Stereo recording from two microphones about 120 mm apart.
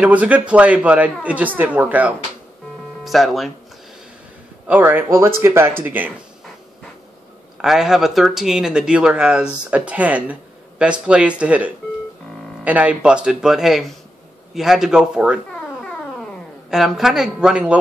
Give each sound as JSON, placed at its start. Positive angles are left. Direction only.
{"t": 0.0, "sound": "speech", "side_deg": -10}
{"t": 3.0, "sound": "speech", "side_deg": 0}
{"t": 4.6, "sound": "speech", "side_deg": -15}
{"t": 7.5, "sound": "a woman's voice", "side_deg": -5}
{"t": 16.7, "sound": "a woman's voice", "side_deg": -5}